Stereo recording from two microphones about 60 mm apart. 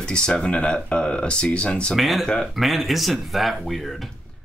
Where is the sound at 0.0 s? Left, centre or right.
Centre.